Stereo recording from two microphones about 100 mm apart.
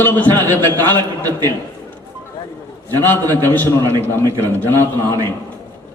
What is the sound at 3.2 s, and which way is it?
Speech, 35° right (ahead or behind).